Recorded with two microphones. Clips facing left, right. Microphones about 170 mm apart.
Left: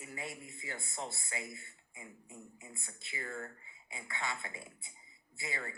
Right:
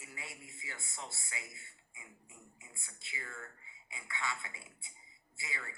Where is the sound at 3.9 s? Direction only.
50° left (ahead or behind).